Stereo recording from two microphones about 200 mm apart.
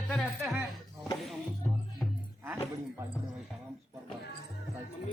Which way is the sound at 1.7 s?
Centre (ahead or behind).